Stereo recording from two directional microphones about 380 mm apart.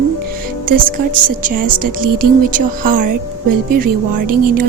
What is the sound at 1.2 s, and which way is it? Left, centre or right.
Speech, right.